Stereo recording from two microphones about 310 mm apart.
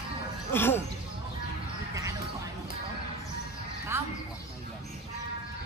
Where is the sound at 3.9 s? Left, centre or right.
Centre.